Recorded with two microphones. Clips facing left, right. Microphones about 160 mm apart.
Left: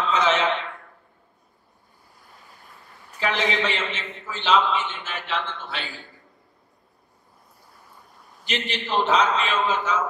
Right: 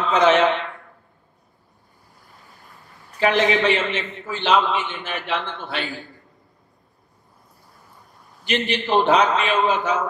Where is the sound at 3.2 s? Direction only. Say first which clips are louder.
Right 6 dB; 55° right (ahead or behind).